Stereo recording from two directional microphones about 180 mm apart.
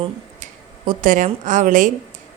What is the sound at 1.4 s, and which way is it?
Speech, 45° right (ahead or behind).